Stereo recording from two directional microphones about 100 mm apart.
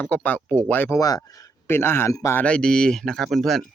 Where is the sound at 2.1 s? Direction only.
35° left (ahead or behind).